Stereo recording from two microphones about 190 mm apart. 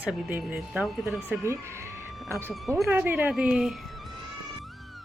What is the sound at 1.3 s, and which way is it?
A woman's voice, 15° right (ahead or behind).